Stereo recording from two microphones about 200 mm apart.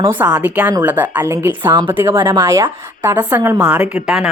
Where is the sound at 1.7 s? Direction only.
25° right (ahead or behind).